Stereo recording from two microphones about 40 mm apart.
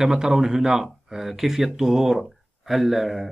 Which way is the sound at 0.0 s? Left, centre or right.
Centre.